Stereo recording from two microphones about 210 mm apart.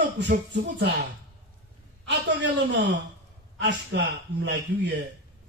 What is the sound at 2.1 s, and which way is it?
A man's voice, 55° right (ahead or behind).